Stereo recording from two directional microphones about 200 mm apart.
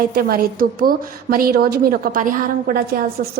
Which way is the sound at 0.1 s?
50° right (ahead or behind).